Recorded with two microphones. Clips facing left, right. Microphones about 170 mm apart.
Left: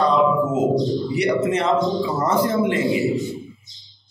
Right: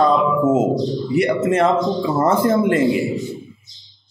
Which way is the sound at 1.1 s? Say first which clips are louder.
Right 5 dB; 50° right (ahead or behind).